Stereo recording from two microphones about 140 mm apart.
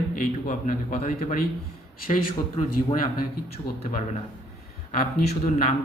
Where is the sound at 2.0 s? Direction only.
90° left.